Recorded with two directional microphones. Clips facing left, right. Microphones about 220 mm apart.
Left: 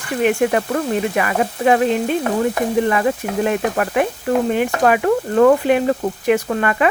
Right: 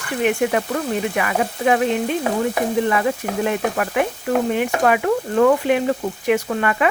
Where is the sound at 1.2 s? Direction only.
40° left (ahead or behind).